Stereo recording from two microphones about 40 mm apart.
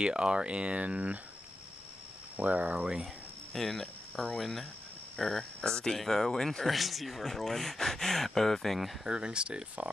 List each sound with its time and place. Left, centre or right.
0.0 s speech: right
2.3 s speech: right
3.5 s speech: centre
4.4 s speech: centre
9.0 s speech: right